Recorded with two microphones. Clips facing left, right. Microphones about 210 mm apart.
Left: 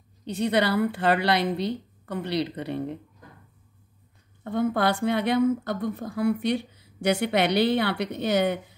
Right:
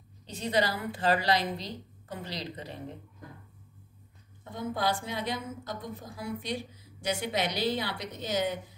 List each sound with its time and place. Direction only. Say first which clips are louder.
0.2 s a woman's voice: left 5 dB; 65° left (ahead or behind)
4.5 s a woman's voice: left 7 dB; 65° left (ahead or behind)